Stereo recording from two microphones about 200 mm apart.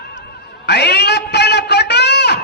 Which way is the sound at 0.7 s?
55° left (ahead or behind).